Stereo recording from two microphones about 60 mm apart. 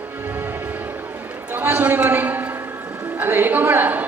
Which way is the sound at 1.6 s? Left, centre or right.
Right.